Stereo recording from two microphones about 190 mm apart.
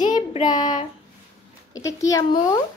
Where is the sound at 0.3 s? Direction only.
20° left (ahead or behind).